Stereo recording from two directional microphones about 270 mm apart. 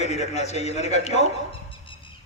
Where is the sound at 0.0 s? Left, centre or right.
Left.